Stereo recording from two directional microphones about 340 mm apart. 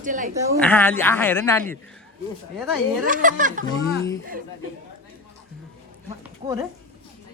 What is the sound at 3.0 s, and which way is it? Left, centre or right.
Speech, right.